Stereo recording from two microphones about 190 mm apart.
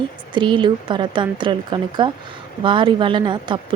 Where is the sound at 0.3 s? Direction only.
25° right (ahead or behind).